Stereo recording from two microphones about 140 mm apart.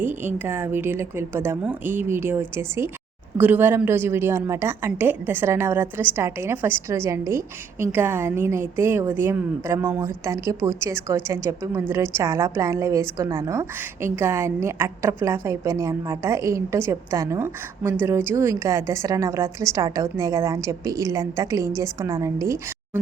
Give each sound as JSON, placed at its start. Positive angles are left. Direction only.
{"t": 0.0, "sound": "a woman's voice", "side_deg": -15}